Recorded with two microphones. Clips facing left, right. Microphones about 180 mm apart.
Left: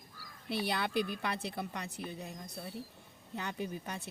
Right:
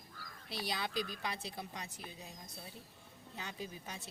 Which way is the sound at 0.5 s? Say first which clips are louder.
Left 6 dB; 60° left (ahead or behind).